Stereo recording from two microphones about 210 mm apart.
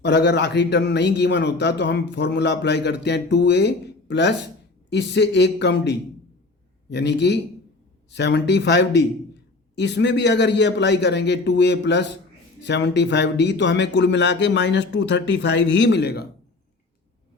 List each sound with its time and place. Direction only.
0.0 s a man's voice: 55° left (ahead or behind)